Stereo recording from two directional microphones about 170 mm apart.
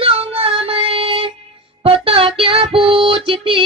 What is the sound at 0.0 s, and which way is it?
Child singing, 35° right (ahead or behind).